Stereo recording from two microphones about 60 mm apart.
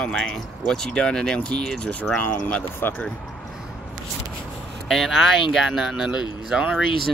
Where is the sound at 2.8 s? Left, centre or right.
Left.